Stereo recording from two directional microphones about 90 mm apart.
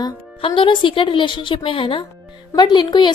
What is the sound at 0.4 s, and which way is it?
Speech, 70° left (ahead or behind).